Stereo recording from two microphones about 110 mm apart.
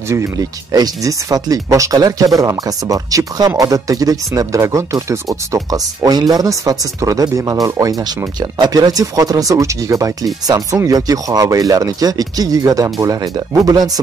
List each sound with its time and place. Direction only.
0.1 s speech: 25° right (ahead or behind)